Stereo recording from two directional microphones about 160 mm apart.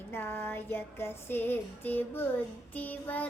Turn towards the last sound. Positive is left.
turn(degrees=10)  # may be behind; listen again after turning